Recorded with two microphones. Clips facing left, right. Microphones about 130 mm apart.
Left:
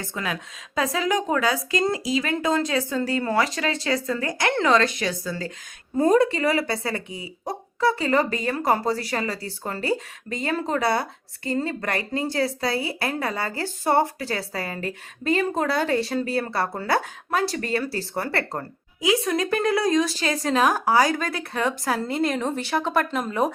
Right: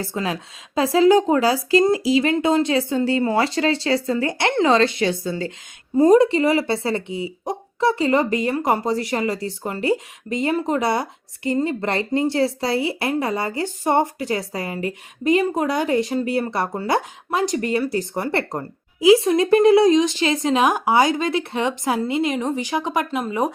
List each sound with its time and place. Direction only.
0.0 s a woman's voice: 30° right (ahead or behind); by 23.5 s 10° right (ahead or behind)